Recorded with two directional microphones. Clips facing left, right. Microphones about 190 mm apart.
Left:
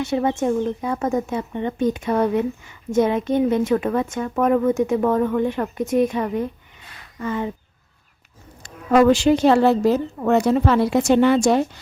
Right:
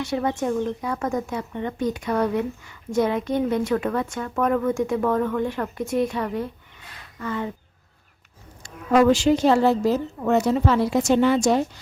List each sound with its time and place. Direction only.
0.0 s a woman's voice: 25° left (ahead or behind)
8.6 s a woman's voice: 60° left (ahead or behind)